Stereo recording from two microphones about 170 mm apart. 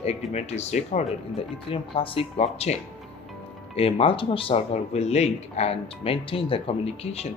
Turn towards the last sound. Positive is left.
turn(degrees=35)  # may be behind; listen again after turning